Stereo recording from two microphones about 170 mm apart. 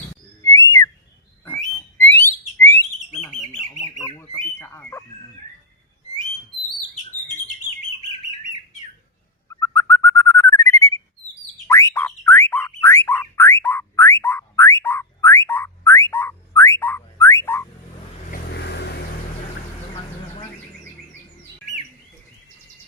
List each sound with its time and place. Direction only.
0.4 s whistling: 20° left (ahead or behind)
1.5 s a sound: 15° left (ahead or behind)
2.6 s bird: 15° left (ahead or behind)
9.6 s bird: 15° left (ahead or behind)
11.7 s a sound: 15° left (ahead or behind)
18.3 s vehicle: 70° left (ahead or behind)